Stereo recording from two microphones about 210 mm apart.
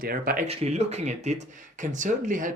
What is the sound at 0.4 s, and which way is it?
Speech, 30° right (ahead or behind).